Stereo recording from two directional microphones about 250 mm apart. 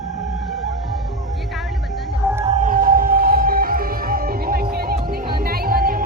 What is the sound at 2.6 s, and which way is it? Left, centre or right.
Music, right.